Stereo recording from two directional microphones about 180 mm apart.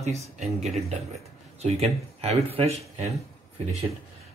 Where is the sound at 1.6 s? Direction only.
35° right (ahead or behind).